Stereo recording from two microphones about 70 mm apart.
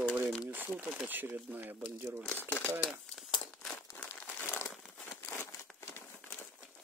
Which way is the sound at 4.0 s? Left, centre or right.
Left.